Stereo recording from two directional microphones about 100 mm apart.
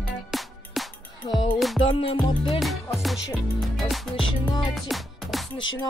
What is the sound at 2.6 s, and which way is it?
Music, centre (ahead or behind).